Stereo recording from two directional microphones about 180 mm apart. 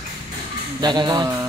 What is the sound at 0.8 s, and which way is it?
Speech, 25° right (ahead or behind).